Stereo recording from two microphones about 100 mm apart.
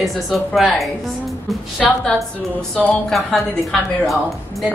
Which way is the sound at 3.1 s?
Centre (ahead or behind).